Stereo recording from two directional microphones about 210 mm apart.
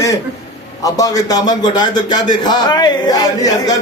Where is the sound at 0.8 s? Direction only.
15° left (ahead or behind).